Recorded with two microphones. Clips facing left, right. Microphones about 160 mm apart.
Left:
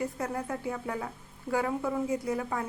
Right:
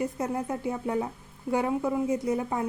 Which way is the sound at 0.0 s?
20° right (ahead or behind).